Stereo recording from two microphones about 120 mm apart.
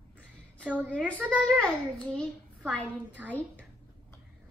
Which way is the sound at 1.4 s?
5° left (ahead or behind).